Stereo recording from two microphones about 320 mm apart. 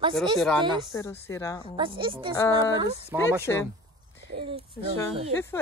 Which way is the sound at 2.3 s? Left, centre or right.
Centre.